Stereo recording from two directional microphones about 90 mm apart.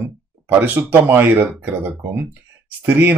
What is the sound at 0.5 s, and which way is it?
Speech, 20° right (ahead or behind).